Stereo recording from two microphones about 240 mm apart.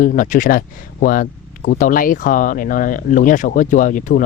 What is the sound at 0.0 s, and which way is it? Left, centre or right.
Speech, left.